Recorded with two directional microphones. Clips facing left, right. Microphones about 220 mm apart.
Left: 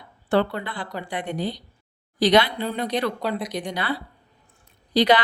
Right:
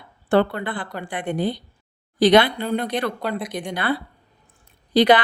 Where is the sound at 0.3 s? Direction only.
50° right (ahead or behind).